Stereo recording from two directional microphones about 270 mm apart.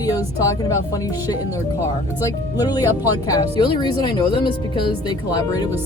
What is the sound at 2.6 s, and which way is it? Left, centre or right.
Speech, centre.